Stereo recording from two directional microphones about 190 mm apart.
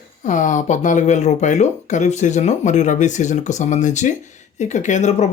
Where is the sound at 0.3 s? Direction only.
40° left (ahead or behind).